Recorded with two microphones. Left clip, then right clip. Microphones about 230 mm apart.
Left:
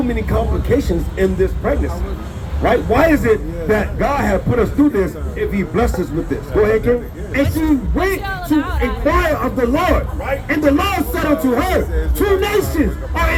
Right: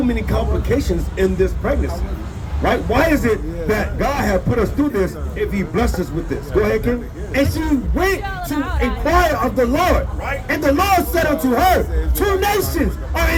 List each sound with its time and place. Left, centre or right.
0.1 s a man's voice: right
8.3 s speech: centre
9.0 s a man's voice: right